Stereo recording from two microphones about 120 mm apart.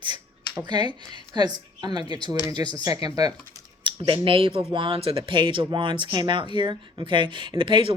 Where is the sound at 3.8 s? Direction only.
45° right (ahead or behind).